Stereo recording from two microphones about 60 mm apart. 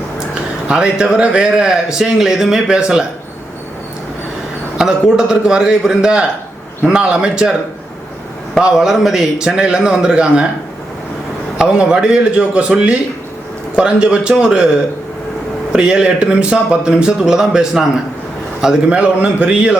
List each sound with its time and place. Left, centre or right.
0.7 s speech: centre
4.8 s speech: centre
8.6 s speech: centre
11.8 s speech: centre
15.7 s a man's voice: centre